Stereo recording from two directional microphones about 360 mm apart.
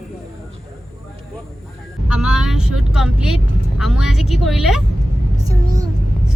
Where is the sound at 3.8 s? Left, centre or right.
Centre.